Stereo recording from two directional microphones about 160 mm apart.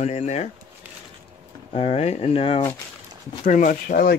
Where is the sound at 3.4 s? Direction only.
55° left (ahead or behind).